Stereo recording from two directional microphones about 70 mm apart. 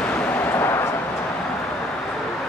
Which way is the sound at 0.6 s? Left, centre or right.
Left.